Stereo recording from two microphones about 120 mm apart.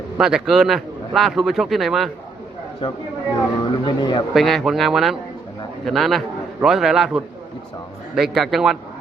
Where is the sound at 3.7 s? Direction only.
40° left (ahead or behind).